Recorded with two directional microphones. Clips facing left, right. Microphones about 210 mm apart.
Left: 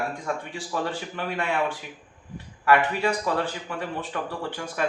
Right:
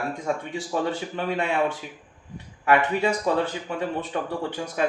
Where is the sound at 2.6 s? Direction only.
20° right (ahead or behind).